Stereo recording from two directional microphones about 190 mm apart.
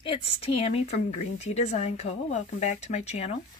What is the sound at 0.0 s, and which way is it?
A woman's voice, 30° left (ahead or behind).